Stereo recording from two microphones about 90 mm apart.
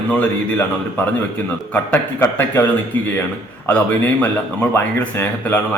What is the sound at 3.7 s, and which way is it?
A man's voice, 20° left (ahead or behind).